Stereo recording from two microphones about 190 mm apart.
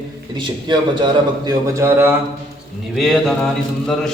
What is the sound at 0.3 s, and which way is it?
A man's voice, 25° right (ahead or behind).